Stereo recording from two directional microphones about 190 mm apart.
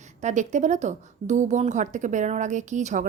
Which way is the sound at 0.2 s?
40° right (ahead or behind).